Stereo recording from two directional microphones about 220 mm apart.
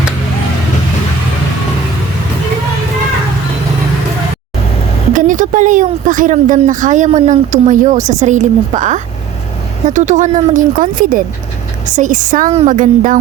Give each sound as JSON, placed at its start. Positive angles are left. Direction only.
{"t": 5.1, "sound": "speech", "side_deg": -35}